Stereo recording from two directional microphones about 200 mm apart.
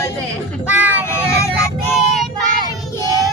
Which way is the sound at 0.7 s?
10° right (ahead or behind).